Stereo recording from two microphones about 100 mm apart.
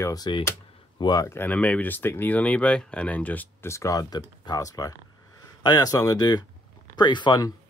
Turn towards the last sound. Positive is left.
turn(degrees=45)  # may be behind; listen again after turning